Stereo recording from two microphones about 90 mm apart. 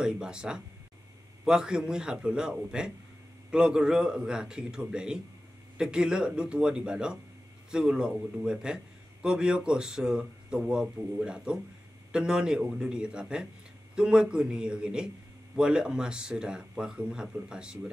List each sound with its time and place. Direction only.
0.0 s a man's voice: 10° right (ahead or behind)